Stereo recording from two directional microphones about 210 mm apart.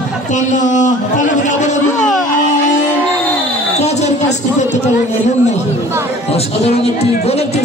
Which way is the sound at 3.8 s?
30° left (ahead or behind).